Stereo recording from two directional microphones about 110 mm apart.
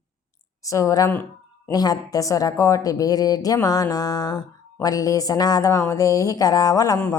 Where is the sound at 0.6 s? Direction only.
30° left (ahead or behind).